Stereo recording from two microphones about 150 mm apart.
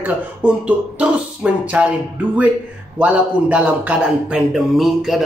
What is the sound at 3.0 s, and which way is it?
Speech, 10° right (ahead or behind).